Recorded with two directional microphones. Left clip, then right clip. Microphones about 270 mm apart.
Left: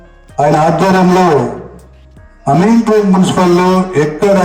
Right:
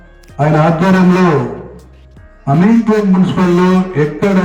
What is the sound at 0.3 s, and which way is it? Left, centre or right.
A man's voice, left.